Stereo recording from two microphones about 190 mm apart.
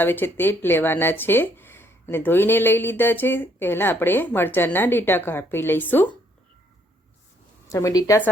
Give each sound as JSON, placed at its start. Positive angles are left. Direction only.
{"t": 0.0, "sound": "speech", "side_deg": 10}
{"t": 7.7, "sound": "speech", "side_deg": 15}